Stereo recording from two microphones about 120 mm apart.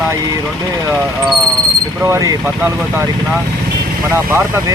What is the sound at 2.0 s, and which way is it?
Speech, 25° right (ahead or behind).